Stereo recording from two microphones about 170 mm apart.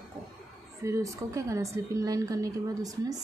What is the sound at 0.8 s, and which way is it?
A woman's voice, 20° right (ahead or behind).